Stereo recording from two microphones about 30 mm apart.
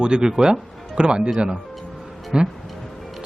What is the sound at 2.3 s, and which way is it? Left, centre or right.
Speech, right.